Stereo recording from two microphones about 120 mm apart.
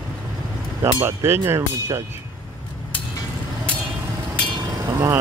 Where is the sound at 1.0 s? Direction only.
20° right (ahead or behind).